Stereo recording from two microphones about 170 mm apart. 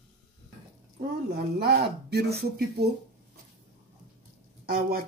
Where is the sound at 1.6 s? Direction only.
70° right (ahead or behind).